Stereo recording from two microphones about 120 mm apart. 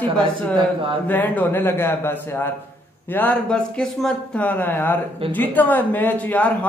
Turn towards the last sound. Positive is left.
turn(degrees=10)  # may be behind; listen again after turning